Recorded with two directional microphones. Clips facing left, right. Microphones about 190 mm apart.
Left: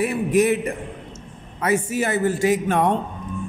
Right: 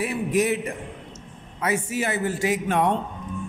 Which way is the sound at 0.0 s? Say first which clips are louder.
Left 4 dB; 55° left (ahead or behind).